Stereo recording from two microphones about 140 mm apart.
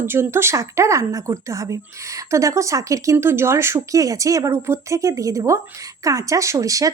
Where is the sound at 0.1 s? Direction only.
20° right (ahead or behind).